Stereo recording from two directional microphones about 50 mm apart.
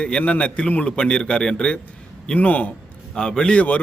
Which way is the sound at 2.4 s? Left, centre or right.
Left.